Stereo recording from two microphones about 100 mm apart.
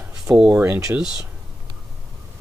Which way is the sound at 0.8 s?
10° right (ahead or behind).